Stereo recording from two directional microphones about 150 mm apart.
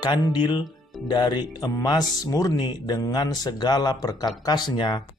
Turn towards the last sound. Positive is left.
turn(degrees=30)  # may be behind; listen again after turning